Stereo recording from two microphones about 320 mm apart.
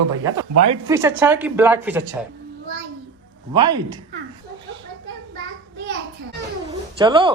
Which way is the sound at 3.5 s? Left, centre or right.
Centre.